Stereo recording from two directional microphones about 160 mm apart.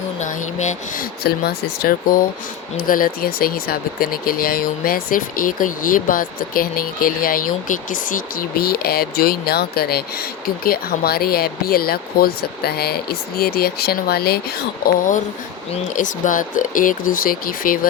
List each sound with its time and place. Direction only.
0.2 s speech: 50° left (ahead or behind)
1.2 s speech: 80° left
15.7 s speech: 50° left (ahead or behind)